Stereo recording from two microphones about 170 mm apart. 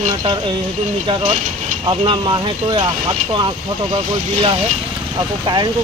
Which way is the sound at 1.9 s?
30° right (ahead or behind).